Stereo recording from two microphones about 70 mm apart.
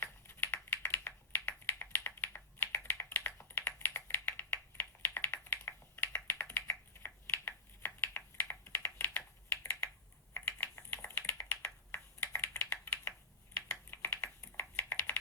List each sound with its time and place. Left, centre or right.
0.0 s computer keyboard: left
10.3 s typing: left
11.9 s computer keyboard: left